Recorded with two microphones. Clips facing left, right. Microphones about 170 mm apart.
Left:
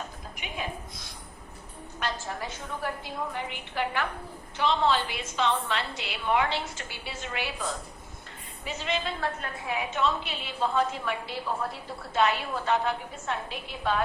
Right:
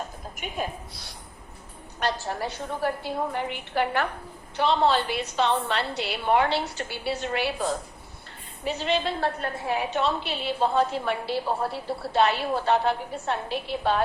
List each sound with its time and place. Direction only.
0.3 s a woman's voice: 45° right (ahead or behind)
3.3 s a woman's voice: 50° right (ahead or behind)
4.5 s a woman's voice: 35° right (ahead or behind)